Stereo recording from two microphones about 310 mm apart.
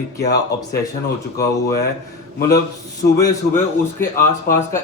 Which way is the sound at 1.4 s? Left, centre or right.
Left.